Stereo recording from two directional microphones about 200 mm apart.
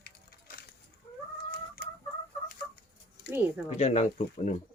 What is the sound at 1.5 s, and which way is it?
Chicken, 50° left (ahead or behind).